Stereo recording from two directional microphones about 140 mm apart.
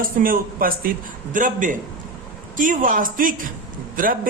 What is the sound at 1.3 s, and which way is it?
A man's voice, 70° right (ahead or behind).